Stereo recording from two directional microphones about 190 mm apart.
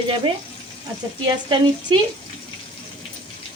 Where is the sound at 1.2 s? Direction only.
25° right (ahead or behind).